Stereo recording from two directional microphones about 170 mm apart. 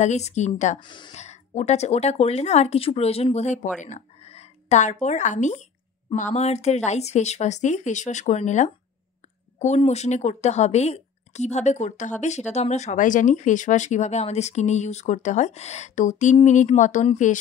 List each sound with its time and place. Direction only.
0.0 s speech: 40° left (ahead or behind)
0.7 s speech: 25° left (ahead or behind)
1.1 s speech: 40° left (ahead or behind)
3.8 s a sound: 40° left (ahead or behind)
5.0 s speech: 45° left (ahead or behind)